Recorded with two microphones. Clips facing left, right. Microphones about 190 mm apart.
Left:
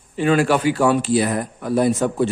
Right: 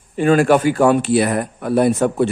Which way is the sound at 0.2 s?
50° right (ahead or behind).